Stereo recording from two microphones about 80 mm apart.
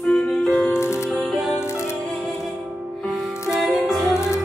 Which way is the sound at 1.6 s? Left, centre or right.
Left.